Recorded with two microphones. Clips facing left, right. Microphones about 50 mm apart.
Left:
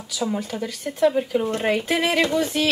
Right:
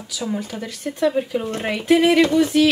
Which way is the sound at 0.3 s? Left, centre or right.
Centre.